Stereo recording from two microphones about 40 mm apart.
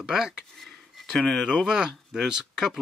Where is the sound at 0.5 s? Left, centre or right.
Centre.